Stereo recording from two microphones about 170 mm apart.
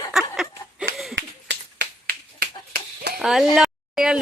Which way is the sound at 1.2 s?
90° right.